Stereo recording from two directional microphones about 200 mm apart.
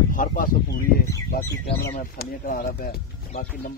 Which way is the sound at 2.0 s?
45° left (ahead or behind).